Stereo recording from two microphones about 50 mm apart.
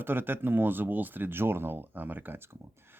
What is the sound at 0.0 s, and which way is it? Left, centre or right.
Speech, right.